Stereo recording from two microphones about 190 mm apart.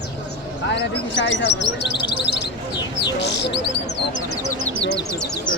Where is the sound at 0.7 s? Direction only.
70° left (ahead or behind).